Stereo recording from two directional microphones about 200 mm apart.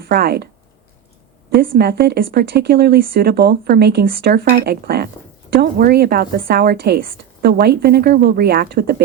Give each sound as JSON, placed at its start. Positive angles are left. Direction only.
{"t": 0.1, "sound": "speech", "side_deg": -50}
{"t": 1.5, "sound": "speech", "side_deg": -45}